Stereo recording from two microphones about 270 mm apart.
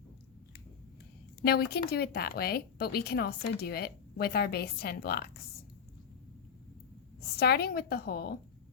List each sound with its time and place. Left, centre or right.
1.4 s a woman's voice: left
7.2 s a woman's voice: left